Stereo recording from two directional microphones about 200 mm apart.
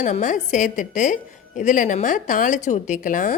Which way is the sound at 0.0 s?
40° left (ahead or behind).